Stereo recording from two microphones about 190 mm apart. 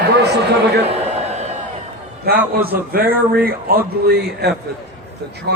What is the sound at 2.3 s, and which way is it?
Speech, 55° right (ahead or behind).